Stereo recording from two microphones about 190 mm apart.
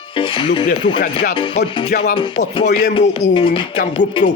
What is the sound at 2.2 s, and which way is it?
Speech, 25° left (ahead or behind).